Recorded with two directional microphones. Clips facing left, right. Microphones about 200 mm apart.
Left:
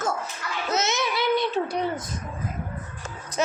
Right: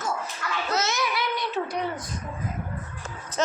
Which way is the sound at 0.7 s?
20° left (ahead or behind).